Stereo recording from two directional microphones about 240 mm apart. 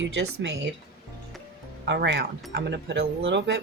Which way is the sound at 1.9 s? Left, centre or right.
Right.